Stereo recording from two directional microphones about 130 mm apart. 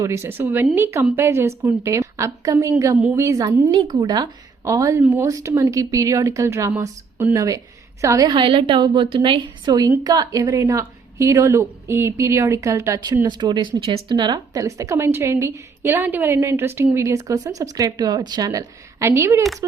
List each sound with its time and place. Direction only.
0.0 s a woman's voice: 20° right (ahead or behind)
3.7 s a woman's voice: 35° right (ahead or behind)
8.3 s a woman's voice: 40° right (ahead or behind); by 19.5 s 20° right (ahead or behind)